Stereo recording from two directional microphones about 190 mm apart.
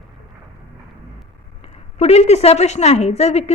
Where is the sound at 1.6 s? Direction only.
30° left (ahead or behind).